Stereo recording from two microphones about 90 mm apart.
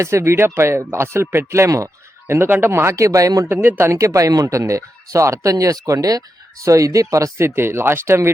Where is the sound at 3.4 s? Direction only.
20° right (ahead or behind).